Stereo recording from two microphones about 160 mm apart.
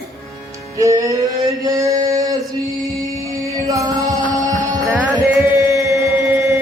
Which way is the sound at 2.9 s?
20° right (ahead or behind).